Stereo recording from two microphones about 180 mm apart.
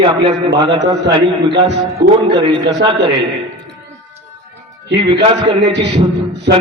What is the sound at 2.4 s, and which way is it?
Speech, 25° right (ahead or behind).